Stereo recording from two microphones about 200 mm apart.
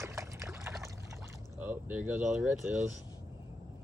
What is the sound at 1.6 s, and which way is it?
Speech, 10° right (ahead or behind).